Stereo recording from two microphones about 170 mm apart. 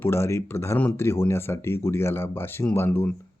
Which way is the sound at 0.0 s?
15° left (ahead or behind).